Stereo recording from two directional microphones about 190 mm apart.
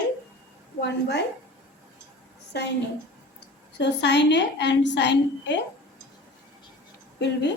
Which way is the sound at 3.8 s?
65° left (ahead or behind).